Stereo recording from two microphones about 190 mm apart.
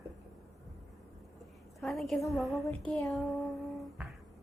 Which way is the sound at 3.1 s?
Centre (ahead or behind).